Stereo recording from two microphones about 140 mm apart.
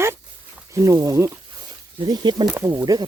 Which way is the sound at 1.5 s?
35° right (ahead or behind).